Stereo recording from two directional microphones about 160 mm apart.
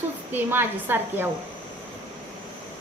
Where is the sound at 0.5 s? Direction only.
15° right (ahead or behind).